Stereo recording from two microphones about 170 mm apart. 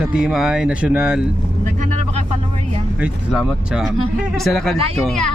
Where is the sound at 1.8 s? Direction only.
45° right (ahead or behind).